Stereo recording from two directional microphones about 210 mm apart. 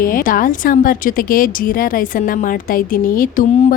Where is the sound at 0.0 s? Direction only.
45° left (ahead or behind).